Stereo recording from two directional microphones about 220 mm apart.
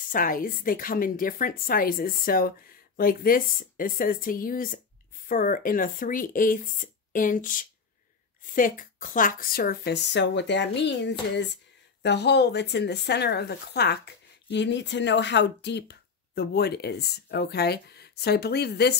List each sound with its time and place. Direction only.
0.0 s a woman's voice: 40° left (ahead or behind)